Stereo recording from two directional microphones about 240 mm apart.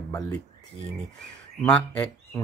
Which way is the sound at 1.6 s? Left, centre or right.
Centre.